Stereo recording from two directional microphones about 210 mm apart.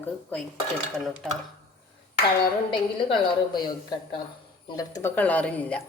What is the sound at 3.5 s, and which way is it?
A man's voice, 20° left (ahead or behind).